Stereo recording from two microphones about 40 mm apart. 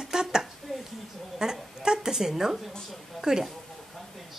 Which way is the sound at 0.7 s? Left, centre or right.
Centre.